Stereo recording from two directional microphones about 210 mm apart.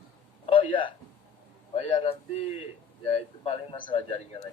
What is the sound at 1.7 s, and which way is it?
A man's voice, 25° left (ahead or behind).